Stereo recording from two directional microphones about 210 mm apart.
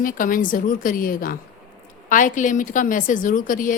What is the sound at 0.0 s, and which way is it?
A woman's voice, 40° left (ahead or behind).